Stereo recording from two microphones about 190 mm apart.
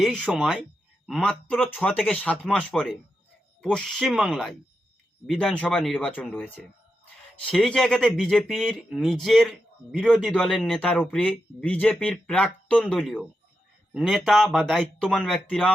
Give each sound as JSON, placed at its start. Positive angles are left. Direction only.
{"t": 0.0, "sound": "speech", "side_deg": 0}